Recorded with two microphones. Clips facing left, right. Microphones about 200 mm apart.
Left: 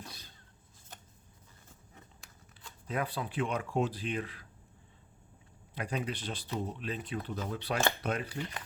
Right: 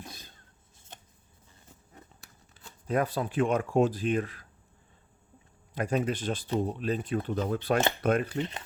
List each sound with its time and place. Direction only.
0.0 s a sound: 50° right (ahead or behind)
2.8 s speech: 45° right (ahead or behind)
5.7 s speech: 45° right (ahead or behind)
8.4 s speech: 25° right (ahead or behind)